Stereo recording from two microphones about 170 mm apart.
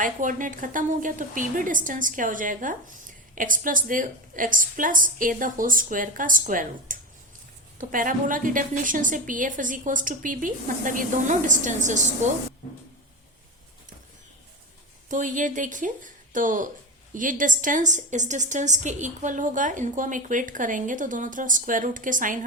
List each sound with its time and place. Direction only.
0.0 s a woman's voice: 50° right (ahead or behind)
15.1 s a woman's voice: 50° right (ahead or behind)